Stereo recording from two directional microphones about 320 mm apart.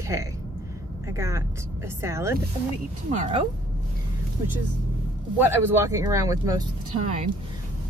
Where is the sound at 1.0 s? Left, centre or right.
Centre.